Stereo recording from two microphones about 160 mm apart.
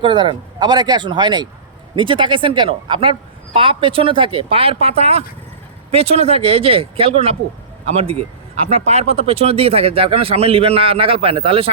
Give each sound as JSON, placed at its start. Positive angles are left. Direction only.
{"t": 0.0, "sound": "speech", "side_deg": -30}
{"t": 8.7, "sound": "speech", "side_deg": -40}